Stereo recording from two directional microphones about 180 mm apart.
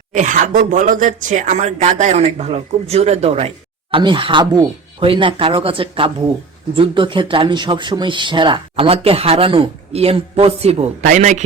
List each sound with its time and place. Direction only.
0.1 s speech: 45° right (ahead or behind)